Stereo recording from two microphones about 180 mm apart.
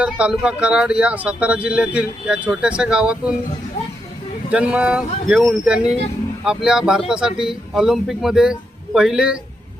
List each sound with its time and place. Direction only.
0.0 s speech: 5° right (ahead or behind)
4.5 s speech: 5° right (ahead or behind)